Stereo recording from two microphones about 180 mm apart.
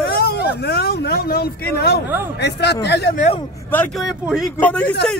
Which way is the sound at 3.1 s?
40° left (ahead or behind).